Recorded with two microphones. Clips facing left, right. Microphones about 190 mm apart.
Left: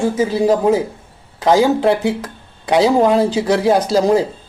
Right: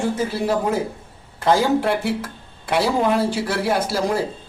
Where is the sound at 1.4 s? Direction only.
15° left (ahead or behind).